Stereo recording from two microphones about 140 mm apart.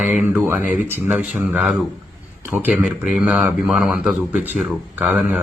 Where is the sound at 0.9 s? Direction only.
15° right (ahead or behind).